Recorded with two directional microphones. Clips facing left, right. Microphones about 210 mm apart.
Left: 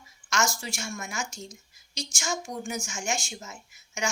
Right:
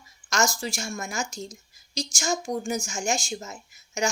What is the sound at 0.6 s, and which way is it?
A woman's voice, 35° right (ahead or behind).